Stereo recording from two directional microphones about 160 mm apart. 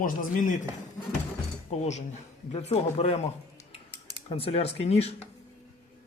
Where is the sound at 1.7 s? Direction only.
45° left (ahead or behind).